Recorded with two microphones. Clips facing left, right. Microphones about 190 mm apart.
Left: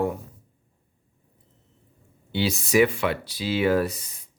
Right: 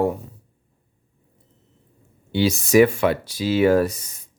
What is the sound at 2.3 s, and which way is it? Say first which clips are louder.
Speech: right 5 dB; 45° right (ahead or behind).